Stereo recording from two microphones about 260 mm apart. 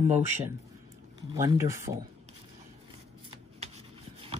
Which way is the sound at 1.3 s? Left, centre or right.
Centre.